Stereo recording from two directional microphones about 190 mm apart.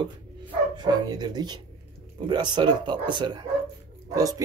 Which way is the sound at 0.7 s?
20° right (ahead or behind).